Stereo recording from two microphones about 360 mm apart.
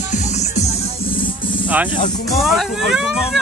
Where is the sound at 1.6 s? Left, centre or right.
Centre.